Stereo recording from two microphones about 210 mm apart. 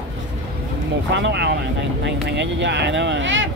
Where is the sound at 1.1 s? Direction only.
55° right (ahead or behind).